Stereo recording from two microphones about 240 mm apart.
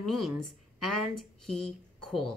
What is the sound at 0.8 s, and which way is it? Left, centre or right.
Speech, right.